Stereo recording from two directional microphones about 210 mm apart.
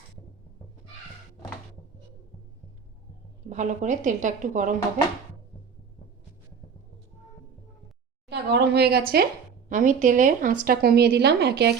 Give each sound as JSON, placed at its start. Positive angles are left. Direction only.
{"t": 3.5, "sound": "a woman's voice", "side_deg": -35}
{"t": 8.3, "sound": "speech", "side_deg": -55}
{"t": 9.6, "sound": "a woman's voice", "side_deg": -40}